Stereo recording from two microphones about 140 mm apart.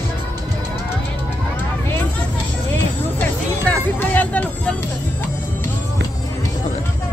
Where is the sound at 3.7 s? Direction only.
10° left (ahead or behind).